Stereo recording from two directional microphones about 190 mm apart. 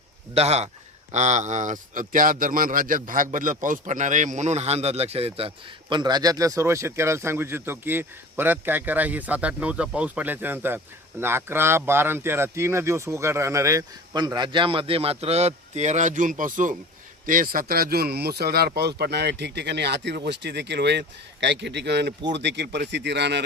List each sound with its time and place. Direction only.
0.3 s a man's voice: 35° right (ahead or behind); by 23.4 s 65° right (ahead or behind)